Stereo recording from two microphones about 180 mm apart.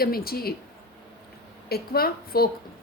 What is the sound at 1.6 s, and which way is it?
Speech, 60° left (ahead or behind).